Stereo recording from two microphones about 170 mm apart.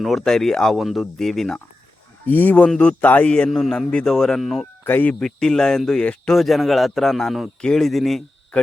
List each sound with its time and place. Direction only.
0.0 s speech: centre (ahead or behind)